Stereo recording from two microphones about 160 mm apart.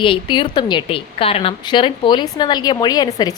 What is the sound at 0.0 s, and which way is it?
A woman's voice, 30° left (ahead or behind).